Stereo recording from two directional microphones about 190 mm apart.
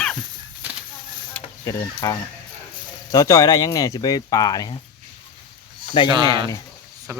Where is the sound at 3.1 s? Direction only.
15° left (ahead or behind).